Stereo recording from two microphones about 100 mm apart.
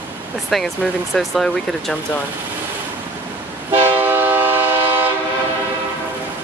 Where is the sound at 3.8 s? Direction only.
20° right (ahead or behind).